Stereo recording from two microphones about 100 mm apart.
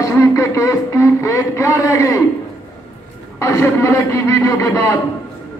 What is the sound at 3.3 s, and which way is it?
A man's voice, 30° left (ahead or behind).